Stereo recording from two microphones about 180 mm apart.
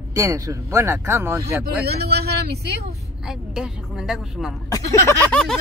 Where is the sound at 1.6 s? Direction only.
60° right (ahead or behind).